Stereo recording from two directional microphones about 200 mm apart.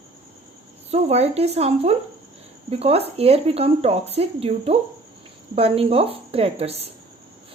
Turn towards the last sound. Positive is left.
turn(degrees=-30)  # may be behind; listen again after turning